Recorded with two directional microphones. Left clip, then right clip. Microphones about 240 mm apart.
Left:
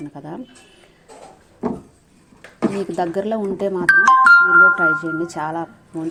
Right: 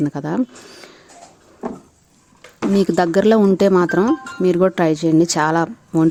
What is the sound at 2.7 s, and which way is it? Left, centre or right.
Speech, right.